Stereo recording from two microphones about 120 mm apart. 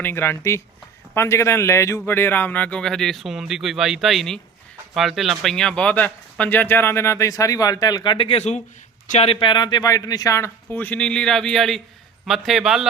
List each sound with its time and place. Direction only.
0.0 s speech: 20° left (ahead or behind); by 12.9 s 5° right (ahead or behind)